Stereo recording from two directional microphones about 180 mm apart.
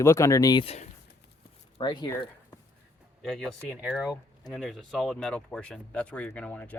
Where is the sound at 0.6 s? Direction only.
35° left (ahead or behind).